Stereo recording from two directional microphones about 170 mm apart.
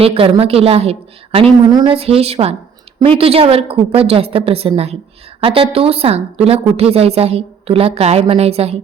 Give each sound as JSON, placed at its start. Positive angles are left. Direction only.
{"t": 0.0, "sound": "a woman's voice", "side_deg": -35}